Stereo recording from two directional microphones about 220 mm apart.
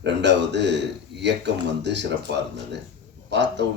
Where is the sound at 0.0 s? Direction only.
50° right (ahead or behind).